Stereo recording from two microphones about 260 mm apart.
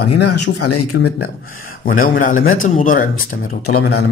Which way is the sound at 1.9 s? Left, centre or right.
Left.